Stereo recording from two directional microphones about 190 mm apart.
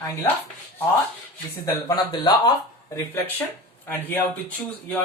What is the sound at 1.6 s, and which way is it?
A woman's voice, 20° left (ahead or behind).